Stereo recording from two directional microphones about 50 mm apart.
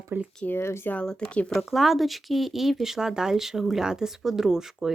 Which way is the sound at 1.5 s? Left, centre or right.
Centre.